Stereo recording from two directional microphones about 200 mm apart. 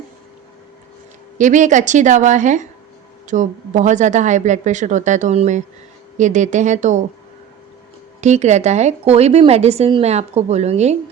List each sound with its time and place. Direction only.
1.4 s a woman's voice: 40° right (ahead or behind)
8.2 s a woman's voice: 35° right (ahead or behind)